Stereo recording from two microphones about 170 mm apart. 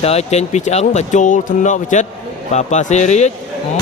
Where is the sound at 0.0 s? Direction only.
40° left (ahead or behind).